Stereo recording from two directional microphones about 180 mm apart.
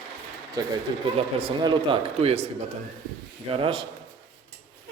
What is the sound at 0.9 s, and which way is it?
Speech, 25° right (ahead or behind).